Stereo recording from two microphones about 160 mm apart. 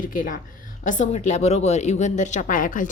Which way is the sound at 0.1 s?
55° left (ahead or behind).